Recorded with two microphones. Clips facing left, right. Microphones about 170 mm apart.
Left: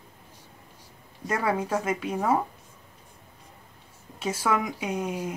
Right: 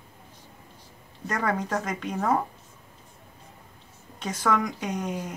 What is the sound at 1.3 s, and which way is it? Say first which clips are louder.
A woman's voice: left 1 dB; 10° left (ahead or behind).